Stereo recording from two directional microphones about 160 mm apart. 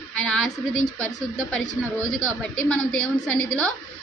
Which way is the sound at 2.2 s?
5° left (ahead or behind).